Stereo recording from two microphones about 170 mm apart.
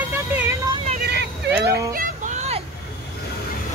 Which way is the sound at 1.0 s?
80° right.